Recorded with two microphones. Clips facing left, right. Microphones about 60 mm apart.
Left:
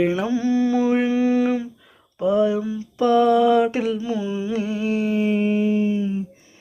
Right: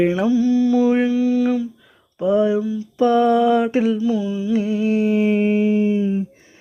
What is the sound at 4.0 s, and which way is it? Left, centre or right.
Mantra, centre.